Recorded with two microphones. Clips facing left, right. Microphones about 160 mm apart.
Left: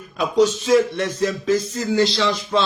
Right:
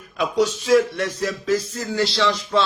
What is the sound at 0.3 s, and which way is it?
Speech, 25° left (ahead or behind).